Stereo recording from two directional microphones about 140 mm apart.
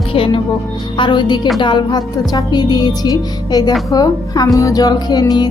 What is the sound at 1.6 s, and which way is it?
Music, 35° left (ahead or behind).